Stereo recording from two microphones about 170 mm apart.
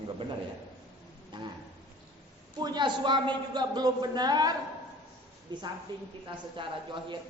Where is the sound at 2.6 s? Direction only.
25° right (ahead or behind).